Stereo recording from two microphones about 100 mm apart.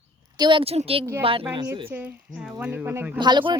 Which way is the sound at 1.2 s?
65° right (ahead or behind).